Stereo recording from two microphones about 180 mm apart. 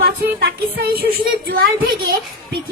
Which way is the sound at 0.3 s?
60° right (ahead or behind).